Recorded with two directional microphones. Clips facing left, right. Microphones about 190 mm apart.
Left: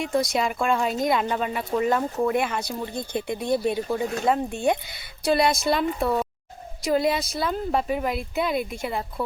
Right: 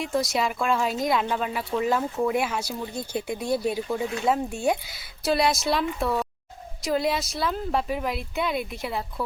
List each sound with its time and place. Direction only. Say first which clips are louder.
0.0 s speech: left 2 dB; centre (ahead or behind)
4.0 s speech: left 2 dB; 45° left (ahead or behind)
4.3 s speech: left 1 dB; 5° left (ahead or behind)